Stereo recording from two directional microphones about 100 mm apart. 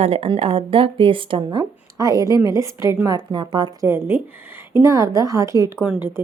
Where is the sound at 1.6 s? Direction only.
35° right (ahead or behind).